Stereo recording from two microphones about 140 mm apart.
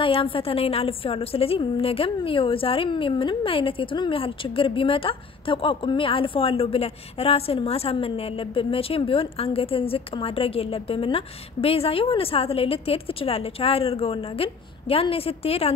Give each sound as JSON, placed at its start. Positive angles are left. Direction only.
{"t": 0.0, "sound": "a woman's voice", "side_deg": 40}